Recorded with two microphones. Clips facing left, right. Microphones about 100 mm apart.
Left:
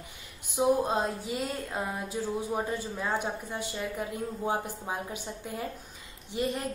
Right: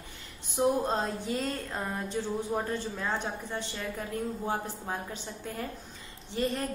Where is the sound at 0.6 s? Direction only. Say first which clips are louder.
Left 1 dB; 5° left (ahead or behind).